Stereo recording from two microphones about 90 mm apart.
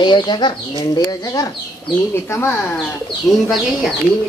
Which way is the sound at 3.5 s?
Centre (ahead or behind).